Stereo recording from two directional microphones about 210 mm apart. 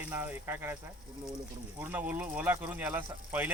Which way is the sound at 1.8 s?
10° right (ahead or behind).